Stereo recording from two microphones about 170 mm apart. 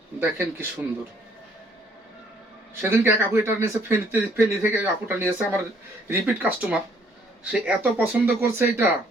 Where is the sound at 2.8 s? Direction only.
15° right (ahead or behind).